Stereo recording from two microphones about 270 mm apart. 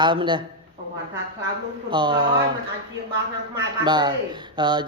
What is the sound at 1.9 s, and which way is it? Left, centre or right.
Speech, centre.